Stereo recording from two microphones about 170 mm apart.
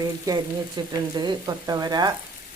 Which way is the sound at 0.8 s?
25° right (ahead or behind).